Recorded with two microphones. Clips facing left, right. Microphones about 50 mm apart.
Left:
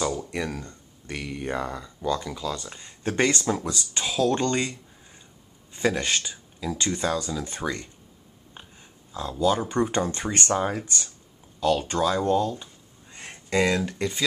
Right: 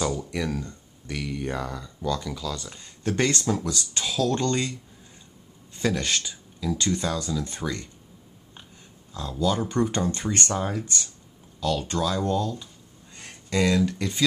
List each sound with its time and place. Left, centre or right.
0.0 s speech: centre
2.7 s speech: centre
5.8 s speech: centre
9.1 s speech: centre
13.1 s a sound: left